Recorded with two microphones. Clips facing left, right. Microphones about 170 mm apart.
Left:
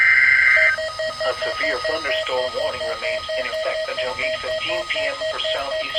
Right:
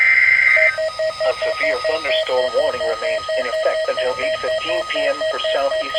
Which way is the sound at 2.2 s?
40° right (ahead or behind).